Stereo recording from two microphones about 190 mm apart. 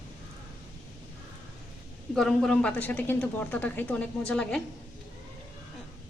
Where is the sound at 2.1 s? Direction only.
5° left (ahead or behind).